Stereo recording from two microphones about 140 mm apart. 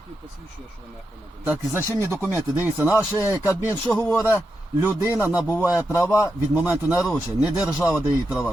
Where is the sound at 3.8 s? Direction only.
10° left (ahead or behind).